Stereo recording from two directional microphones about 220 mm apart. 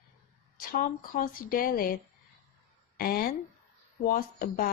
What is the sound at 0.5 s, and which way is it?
Speech, 40° left (ahead or behind).